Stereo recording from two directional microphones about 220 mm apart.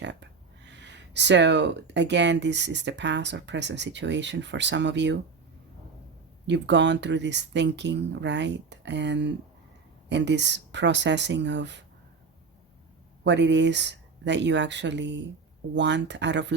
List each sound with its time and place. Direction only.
0.0 s speech: 50° right (ahead or behind)
6.5 s speech: 50° right (ahead or behind)
13.2 s speech: 55° right (ahead or behind)